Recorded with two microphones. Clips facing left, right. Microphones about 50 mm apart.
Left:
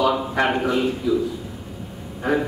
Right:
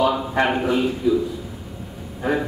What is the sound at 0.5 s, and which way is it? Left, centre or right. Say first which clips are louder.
Speech: even; centre.